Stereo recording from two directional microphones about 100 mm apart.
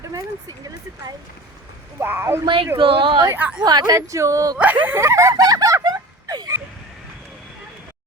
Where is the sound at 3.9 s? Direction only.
30° right (ahead or behind).